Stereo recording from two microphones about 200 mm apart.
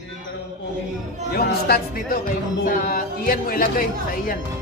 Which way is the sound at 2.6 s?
45° left (ahead or behind).